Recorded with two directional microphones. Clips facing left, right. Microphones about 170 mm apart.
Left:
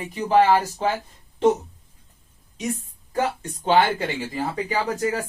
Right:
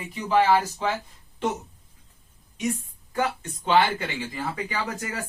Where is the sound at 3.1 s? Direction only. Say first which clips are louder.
Left 2 dB; 35° left (ahead or behind).